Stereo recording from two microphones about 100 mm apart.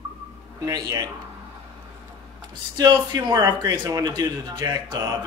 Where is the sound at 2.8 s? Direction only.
45° right (ahead or behind).